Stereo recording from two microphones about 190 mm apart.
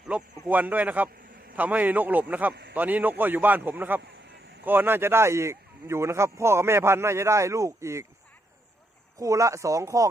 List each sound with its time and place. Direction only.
0.1 s speech: 5° right (ahead or behind)
9.1 s speech: 15° right (ahead or behind)